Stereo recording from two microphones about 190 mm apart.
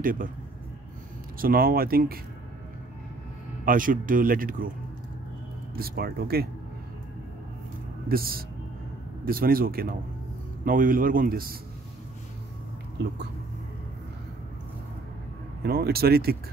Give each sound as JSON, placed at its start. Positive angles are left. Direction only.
{"t": 0.0, "sound": "speech", "side_deg": -45}
{"t": 1.4, "sound": "speech", "side_deg": -50}
{"t": 3.6, "sound": "speech", "side_deg": -45}
{"t": 5.8, "sound": "speech", "side_deg": -50}
{"t": 8.1, "sound": "speech", "side_deg": -50}
{"t": 13.0, "sound": "speech", "side_deg": -65}
{"t": 15.6, "sound": "speech", "side_deg": -55}